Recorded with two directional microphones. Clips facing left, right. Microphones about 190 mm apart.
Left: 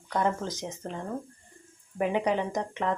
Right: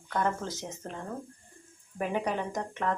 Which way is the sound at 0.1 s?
15° left (ahead or behind).